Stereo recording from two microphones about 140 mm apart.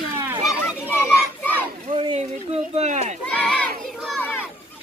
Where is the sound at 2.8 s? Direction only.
55° right (ahead or behind).